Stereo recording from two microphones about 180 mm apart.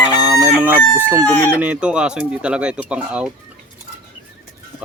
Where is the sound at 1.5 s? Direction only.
10° right (ahead or behind).